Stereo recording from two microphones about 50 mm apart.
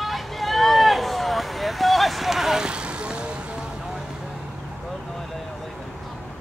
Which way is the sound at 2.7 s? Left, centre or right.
Right.